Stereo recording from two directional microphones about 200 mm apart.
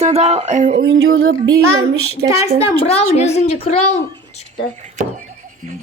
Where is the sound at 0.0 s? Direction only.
30° right (ahead or behind).